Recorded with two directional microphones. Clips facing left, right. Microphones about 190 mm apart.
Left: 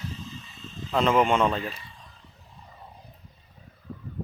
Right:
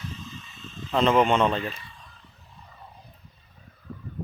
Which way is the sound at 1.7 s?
30° left (ahead or behind).